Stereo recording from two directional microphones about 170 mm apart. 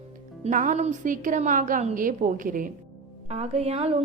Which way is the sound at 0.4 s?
45° right (ahead or behind).